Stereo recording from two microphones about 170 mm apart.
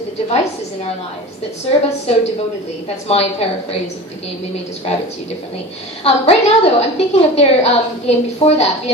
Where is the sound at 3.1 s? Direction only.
35° left (ahead or behind).